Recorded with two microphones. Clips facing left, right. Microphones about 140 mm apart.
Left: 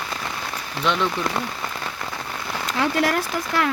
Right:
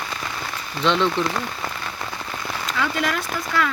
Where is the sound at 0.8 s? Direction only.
10° left (ahead or behind).